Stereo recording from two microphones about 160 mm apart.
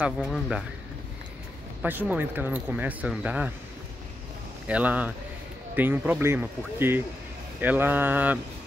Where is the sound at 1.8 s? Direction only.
10° right (ahead or behind).